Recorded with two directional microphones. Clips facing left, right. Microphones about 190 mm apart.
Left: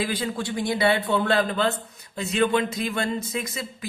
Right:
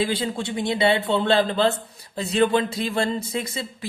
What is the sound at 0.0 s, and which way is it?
Speech, 25° right (ahead or behind).